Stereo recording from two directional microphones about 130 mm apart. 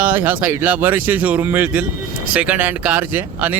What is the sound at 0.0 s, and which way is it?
Speech, 15° right (ahead or behind).